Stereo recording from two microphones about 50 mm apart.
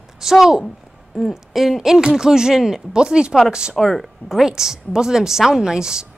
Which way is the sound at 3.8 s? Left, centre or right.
Centre.